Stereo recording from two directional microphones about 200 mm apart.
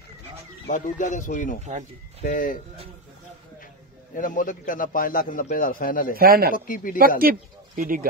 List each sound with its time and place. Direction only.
0.7 s speech: 40° left (ahead or behind)
1.6 s speech: 35° right (ahead or behind)
2.2 s a man's voice: 45° left (ahead or behind)
4.1 s a man's voice: 40° left (ahead or behind)
6.1 s speech: 50° right (ahead or behind)
6.5 s a man's voice: 45° left (ahead or behind)
7.2 s speech: 45° right (ahead or behind)